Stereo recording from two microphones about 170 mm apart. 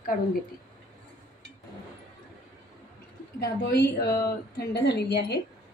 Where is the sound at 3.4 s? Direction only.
75° left (ahead or behind).